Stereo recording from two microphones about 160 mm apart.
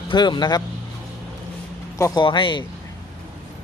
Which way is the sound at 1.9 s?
20° left (ahead or behind).